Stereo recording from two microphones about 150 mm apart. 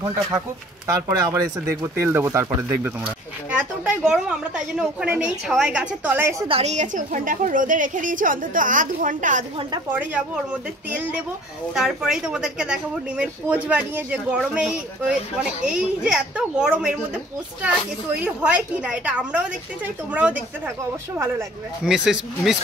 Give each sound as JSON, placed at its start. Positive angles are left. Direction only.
{"t": 1.0, "sound": "speech", "side_deg": -20}
{"t": 3.4, "sound": "a woman's voice", "side_deg": -10}
{"t": 6.4, "sound": "a woman's voice", "side_deg": -40}
{"t": 9.8, "sound": "a woman's voice", "side_deg": -10}
{"t": 18.2, "sound": "a woman's voice", "side_deg": -10}
{"t": 21.8, "sound": "speech", "side_deg": -5}